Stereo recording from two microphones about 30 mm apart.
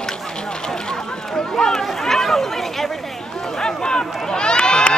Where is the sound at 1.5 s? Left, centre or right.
Centre.